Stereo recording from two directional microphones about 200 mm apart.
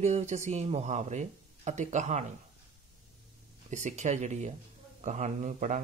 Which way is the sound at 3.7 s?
35° right (ahead or behind).